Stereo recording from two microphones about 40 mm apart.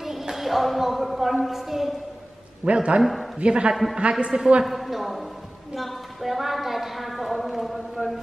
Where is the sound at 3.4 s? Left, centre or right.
Right.